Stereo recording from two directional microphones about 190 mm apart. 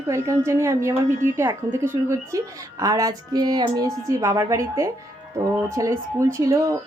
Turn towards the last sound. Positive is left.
turn(degrees=-15)  # may be behind; listen again after turning